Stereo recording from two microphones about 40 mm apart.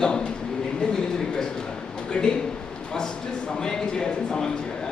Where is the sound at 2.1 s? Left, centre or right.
Left.